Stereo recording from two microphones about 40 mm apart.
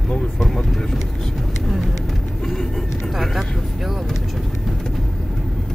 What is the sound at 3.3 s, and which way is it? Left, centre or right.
Speech, centre.